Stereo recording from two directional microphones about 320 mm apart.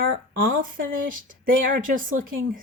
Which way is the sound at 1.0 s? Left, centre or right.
Right.